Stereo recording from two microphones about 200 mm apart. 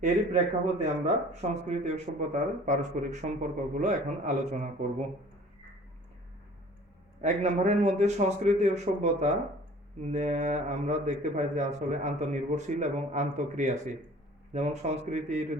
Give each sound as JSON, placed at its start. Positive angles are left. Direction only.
{"t": 0.6, "sound": "speech", "side_deg": -35}
{"t": 7.2, "sound": "speech", "side_deg": -35}